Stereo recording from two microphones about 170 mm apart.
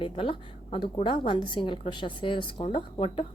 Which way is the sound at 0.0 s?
30° left (ahead or behind).